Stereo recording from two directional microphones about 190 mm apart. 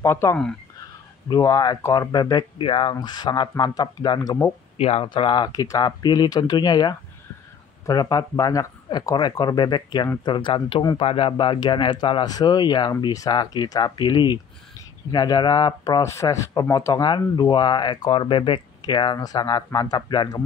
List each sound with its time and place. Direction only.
0.0 s speech: 15° left (ahead or behind)
1.3 s speech: 20° left (ahead or behind)
4.7 s speech: 30° left (ahead or behind)